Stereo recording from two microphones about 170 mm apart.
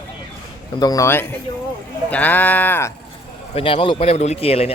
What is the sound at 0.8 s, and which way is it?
Speech, 20° left (ahead or behind).